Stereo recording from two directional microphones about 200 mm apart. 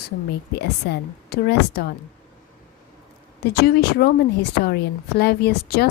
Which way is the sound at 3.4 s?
55° left (ahead or behind).